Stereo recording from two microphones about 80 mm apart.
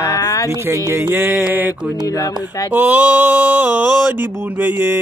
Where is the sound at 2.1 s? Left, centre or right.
Left.